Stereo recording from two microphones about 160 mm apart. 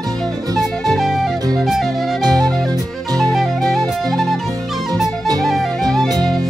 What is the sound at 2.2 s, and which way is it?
Music, 25° right (ahead or behind).